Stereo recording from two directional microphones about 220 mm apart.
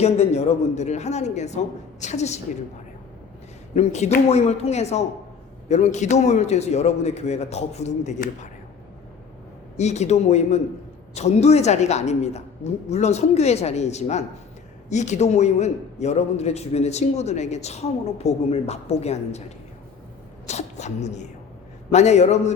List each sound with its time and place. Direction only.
0.0 s a man's voice: 30° left (ahead or behind)
3.8 s a man's voice: 30° left (ahead or behind)
9.7 s a man's voice: 30° left (ahead or behind)